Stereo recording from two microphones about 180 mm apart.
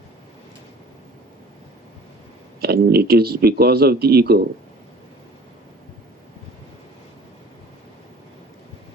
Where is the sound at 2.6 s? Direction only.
60° right (ahead or behind).